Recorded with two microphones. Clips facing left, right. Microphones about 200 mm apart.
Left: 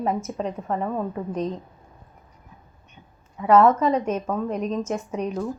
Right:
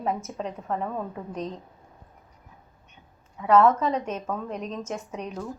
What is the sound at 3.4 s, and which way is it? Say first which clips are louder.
Speech: left 3 dB; 5° left (ahead or behind).